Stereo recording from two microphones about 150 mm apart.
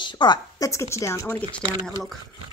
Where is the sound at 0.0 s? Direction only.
30° left (ahead or behind).